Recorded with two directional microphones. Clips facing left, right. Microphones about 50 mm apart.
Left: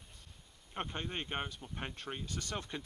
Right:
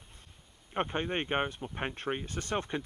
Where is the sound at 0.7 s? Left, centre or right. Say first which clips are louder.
Right 8 dB; right.